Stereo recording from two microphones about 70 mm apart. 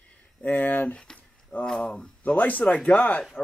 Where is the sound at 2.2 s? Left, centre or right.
Left.